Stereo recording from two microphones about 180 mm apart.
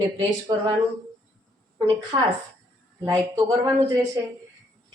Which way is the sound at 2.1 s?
25° right (ahead or behind).